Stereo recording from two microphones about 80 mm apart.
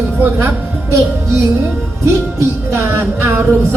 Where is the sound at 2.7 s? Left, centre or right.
Right.